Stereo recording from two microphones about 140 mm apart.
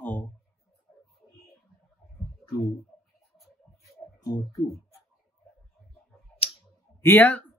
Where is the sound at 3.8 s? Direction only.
25° left (ahead or behind).